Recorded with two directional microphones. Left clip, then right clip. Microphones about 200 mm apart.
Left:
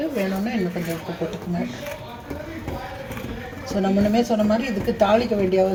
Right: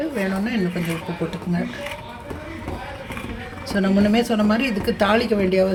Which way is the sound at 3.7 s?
20° right (ahead or behind).